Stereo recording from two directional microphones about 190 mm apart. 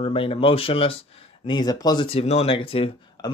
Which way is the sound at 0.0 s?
30° left (ahead or behind).